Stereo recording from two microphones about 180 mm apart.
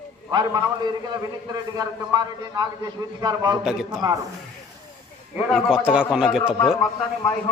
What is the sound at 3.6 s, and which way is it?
Speech, 5° right (ahead or behind).